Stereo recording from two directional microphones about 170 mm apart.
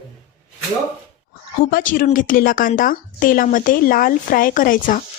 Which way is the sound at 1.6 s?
55° left (ahead or behind).